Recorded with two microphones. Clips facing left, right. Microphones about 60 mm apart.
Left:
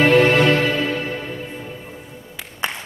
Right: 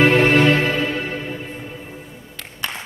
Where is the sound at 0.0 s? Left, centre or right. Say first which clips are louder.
Even; right.